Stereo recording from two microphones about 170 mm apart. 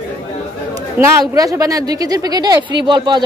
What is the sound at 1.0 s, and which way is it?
Speech, 20° right (ahead or behind).